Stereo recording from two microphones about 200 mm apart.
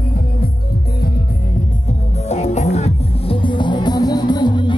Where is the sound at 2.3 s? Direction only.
35° left (ahead or behind).